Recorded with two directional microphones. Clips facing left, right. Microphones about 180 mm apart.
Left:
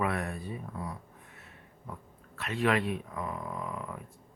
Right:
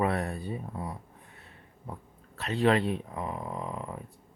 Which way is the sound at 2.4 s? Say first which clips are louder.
Right 4 dB; 35° right (ahead or behind).